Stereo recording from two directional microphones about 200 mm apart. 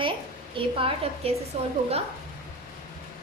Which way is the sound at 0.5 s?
25° right (ahead or behind).